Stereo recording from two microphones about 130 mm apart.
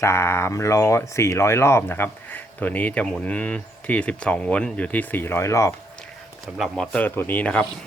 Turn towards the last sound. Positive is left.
turn(degrees=10)  # may be behind; listen again after turning